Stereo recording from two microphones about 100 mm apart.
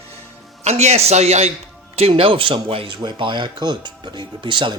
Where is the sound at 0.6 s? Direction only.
90° right.